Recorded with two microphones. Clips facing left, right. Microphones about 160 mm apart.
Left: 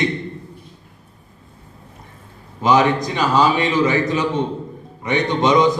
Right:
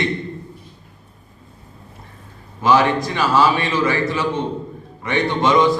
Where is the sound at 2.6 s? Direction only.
20° left (ahead or behind).